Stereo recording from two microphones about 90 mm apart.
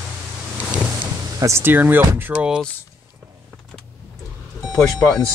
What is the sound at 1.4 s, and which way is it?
Speech, 30° right (ahead or behind).